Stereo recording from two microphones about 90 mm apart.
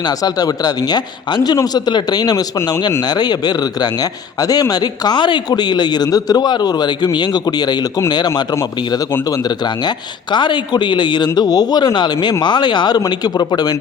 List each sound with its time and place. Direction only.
0.0 s a man's voice: 45° left (ahead or behind)
9.3 s a man's voice: 50° left (ahead or behind)